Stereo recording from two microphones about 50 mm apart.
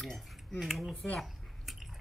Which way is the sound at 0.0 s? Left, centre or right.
Centre.